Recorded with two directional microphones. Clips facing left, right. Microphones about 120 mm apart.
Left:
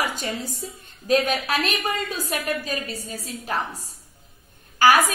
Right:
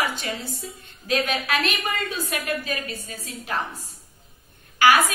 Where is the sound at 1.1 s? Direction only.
40° left (ahead or behind).